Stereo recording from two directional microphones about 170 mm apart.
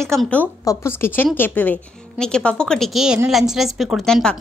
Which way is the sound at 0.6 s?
20° left (ahead or behind).